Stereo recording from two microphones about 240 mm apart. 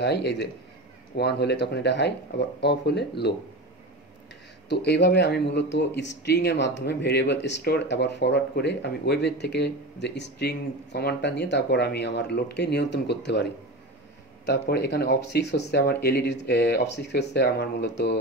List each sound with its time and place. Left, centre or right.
0.0 s speech: left
4.6 s speech: left